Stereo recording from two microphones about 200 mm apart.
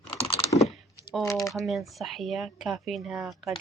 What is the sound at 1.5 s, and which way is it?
Speech, centre (ahead or behind).